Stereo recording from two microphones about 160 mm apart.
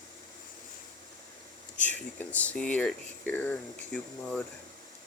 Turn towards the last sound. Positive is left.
turn(degrees=5)  # may be behind; listen again after turning